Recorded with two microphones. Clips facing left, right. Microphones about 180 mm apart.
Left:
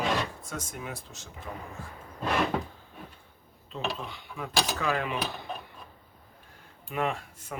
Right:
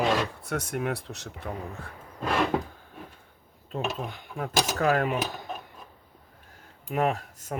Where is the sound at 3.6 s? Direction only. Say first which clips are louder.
Right 3 dB; 50° right (ahead or behind).